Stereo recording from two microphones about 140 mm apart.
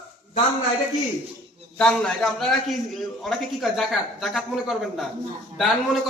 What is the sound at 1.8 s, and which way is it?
A man's voice, 5° left (ahead or behind).